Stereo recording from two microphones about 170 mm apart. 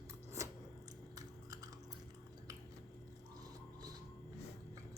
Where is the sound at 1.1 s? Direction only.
20° right (ahead or behind).